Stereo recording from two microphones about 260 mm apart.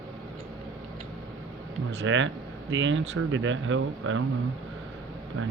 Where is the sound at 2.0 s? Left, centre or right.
Right.